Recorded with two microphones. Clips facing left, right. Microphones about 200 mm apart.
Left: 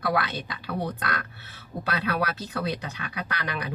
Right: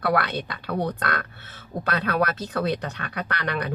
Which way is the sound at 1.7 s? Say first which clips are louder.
Right 4 dB; 40° right (ahead or behind).